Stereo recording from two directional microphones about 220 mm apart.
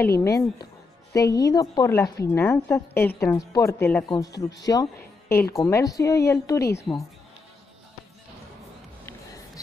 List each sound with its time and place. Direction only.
0.2 s a woman's voice: 15° left (ahead or behind)